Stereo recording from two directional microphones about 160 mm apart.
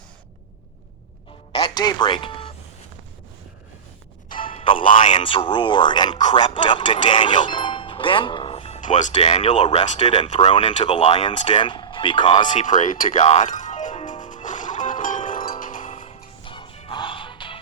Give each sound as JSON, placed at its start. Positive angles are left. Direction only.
{"t": 1.5, "sound": "a sound", "side_deg": 30}
{"t": 4.3, "sound": "speech", "side_deg": 30}
{"t": 8.8, "sound": "speech", "side_deg": 50}
{"t": 9.6, "sound": "speech", "side_deg": 30}
{"t": 10.0, "sound": "speech", "side_deg": 40}
{"t": 10.5, "sound": "speech", "side_deg": 30}
{"t": 12.5, "sound": "music", "side_deg": 50}
{"t": 15.8, "sound": "music", "side_deg": 35}